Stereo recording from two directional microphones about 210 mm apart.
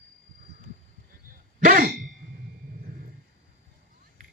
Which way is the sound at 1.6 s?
40° right (ahead or behind).